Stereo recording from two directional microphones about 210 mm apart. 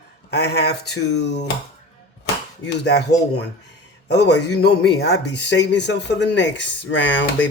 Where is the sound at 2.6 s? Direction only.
50° left (ahead or behind).